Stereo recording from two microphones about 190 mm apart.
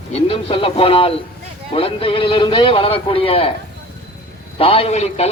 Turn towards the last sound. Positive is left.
turn(degrees=35)  # may be behind; listen again after turning